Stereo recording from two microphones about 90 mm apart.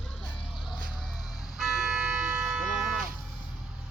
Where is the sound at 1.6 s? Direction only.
5° right (ahead or behind).